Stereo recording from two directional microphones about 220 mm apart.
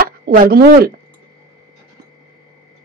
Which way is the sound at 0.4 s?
45° right (ahead or behind).